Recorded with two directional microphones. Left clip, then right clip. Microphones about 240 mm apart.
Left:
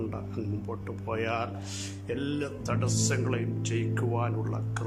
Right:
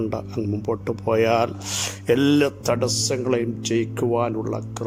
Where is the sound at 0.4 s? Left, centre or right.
Centre.